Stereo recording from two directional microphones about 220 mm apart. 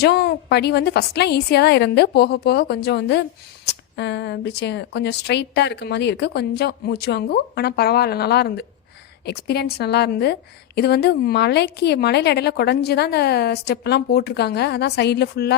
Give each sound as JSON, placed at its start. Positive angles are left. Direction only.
{"t": 0.0, "sound": "speech", "side_deg": 50}